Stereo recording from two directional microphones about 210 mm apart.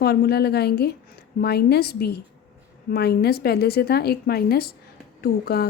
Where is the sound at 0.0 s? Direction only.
50° left (ahead or behind).